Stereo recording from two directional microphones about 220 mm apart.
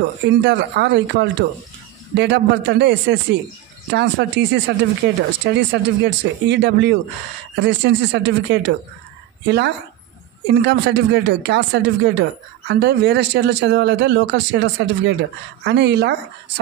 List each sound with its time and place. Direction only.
0.4 s speech: 50° right (ahead or behind)
10.5 s speech: 50° right (ahead or behind)